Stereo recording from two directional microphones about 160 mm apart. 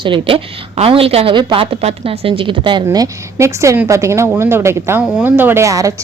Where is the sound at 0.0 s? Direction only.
35° right (ahead or behind).